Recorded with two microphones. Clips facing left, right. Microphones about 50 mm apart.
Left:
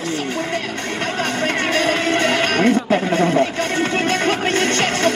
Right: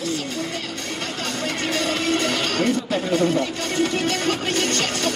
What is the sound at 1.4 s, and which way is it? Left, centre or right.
Speech, left.